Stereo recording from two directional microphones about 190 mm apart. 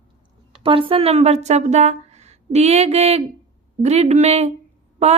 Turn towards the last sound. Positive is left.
turn(degrees=-35)  # may be behind; listen again after turning